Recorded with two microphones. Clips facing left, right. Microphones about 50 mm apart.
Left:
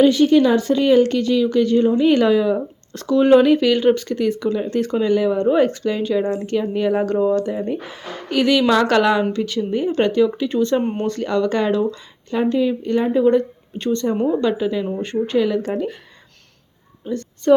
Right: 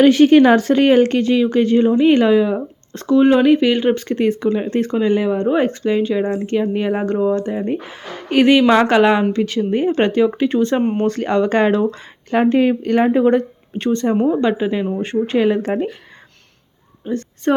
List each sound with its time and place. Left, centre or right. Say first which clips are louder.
0.0 s speech: right 4 dB; right
1.9 s speech: right 2 dB; right
4.1 s speech: right 3 dB; right
11.9 s speech: right 3 dB; right
13.1 s speech: right 1 dB; right
14.2 s speech: right 3 dB; centre
14.4 s speech: right 2 dB; right
17.0 s a woman's voice: right 2 dB; right